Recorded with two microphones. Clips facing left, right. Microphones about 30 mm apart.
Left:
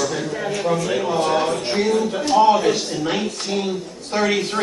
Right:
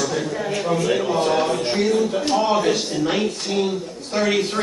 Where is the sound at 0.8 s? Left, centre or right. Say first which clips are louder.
Even; centre.